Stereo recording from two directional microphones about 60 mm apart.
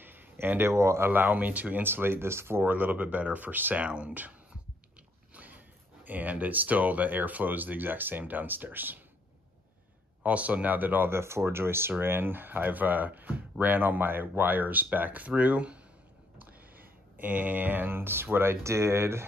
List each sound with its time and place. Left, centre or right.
0.0 s speech: right
2.7 s speech: right
5.3 s a sound: right
6.0 s speech: right
10.2 s speech: right